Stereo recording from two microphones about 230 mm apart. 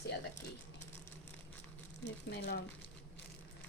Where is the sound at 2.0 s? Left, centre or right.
Left.